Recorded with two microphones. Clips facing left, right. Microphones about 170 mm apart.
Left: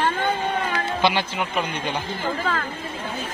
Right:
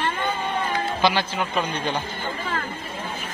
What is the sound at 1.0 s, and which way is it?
Speech, 20° left (ahead or behind).